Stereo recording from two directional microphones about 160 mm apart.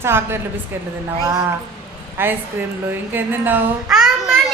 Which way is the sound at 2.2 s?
15° right (ahead or behind).